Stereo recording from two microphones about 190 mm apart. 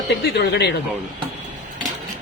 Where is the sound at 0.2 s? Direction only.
60° left (ahead or behind).